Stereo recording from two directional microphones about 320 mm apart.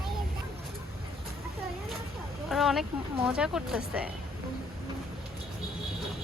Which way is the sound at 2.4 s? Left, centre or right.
Centre.